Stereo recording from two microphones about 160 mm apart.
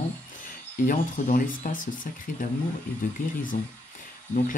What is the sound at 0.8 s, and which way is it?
Speech, 55° left (ahead or behind).